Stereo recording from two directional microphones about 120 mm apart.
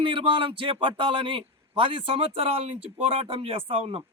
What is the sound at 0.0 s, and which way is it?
A man's voice, 45° right (ahead or behind).